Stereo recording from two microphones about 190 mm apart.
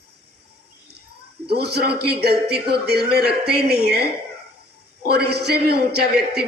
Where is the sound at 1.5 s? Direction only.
60° right (ahead or behind).